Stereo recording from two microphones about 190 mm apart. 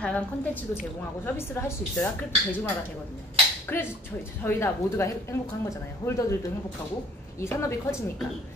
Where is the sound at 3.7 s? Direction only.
10° left (ahead or behind).